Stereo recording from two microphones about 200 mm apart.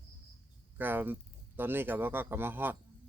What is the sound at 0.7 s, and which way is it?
Speech, 10° right (ahead or behind).